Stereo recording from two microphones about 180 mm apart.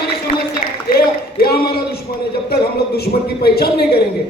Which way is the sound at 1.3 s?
60° left (ahead or behind).